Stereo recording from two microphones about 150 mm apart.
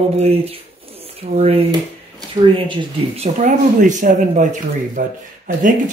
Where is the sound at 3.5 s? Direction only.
55° right (ahead or behind).